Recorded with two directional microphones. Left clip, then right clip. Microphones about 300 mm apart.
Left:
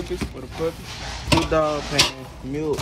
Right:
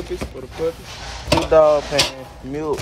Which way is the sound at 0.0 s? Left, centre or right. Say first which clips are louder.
Right 2 dB; centre.